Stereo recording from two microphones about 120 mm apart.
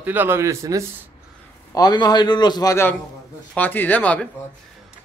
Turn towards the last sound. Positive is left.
turn(degrees=10)  # may be behind; listen again after turning